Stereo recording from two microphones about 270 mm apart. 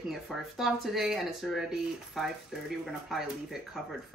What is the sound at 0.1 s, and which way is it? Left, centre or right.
Speech, centre.